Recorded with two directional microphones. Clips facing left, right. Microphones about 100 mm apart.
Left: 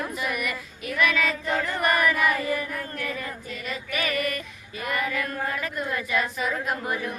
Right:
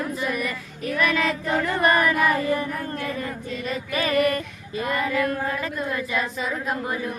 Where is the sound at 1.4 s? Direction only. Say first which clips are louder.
Right 3 dB; 20° right (ahead or behind).